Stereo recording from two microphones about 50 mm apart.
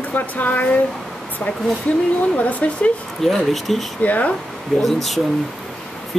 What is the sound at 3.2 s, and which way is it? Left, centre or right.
Speech, centre.